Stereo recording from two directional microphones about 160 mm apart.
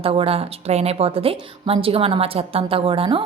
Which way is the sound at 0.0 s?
35° right (ahead or behind).